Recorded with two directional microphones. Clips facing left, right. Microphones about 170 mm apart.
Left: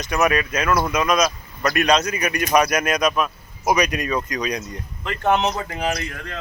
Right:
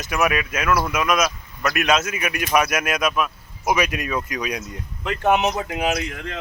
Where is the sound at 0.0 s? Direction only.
5° right (ahead or behind).